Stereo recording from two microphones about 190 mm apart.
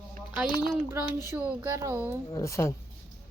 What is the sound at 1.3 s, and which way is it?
Speech, 15° right (ahead or behind).